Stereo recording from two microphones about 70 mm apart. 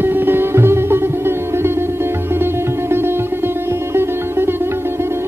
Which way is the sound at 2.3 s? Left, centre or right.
Right.